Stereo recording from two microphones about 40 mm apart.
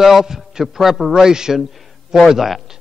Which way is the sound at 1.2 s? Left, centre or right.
Centre.